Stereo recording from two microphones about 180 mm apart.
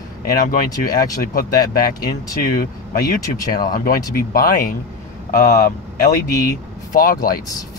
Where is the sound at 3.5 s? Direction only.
55° left (ahead or behind).